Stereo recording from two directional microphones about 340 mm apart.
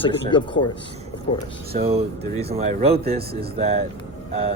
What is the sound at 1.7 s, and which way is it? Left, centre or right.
Speech, centre.